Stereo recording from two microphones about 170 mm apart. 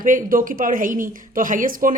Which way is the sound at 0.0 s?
50° right (ahead or behind).